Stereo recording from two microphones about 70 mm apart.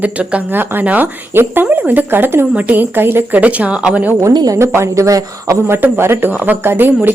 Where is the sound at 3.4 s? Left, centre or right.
Centre.